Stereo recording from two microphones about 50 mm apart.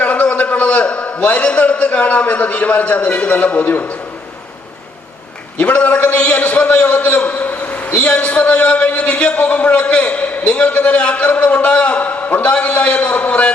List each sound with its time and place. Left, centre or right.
0.0 s a man's voice: left
5.5 s a man's voice: left